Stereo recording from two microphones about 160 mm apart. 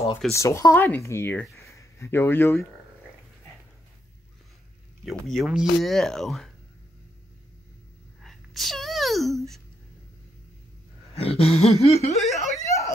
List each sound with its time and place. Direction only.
0.3 s speech: 20° left (ahead or behind)
1.6 s a sound: 20° left (ahead or behind)
5.0 s speech: centre (ahead or behind)
8.2 s sneeze: centre (ahead or behind)
11.1 s a sound: 35° left (ahead or behind)
12.2 s speech: centre (ahead or behind)
12.6 s snicker: 20° left (ahead or behind)